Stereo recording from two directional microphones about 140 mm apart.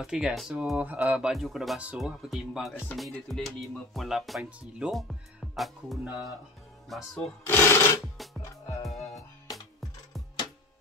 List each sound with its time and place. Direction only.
0.0 s speech: 5° right (ahead or behind)
7.4 s speech: 15° left (ahead or behind)
8.8 s music: centre (ahead or behind)